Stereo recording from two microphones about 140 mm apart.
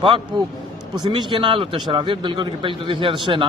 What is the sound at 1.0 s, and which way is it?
Speech, 35° right (ahead or behind).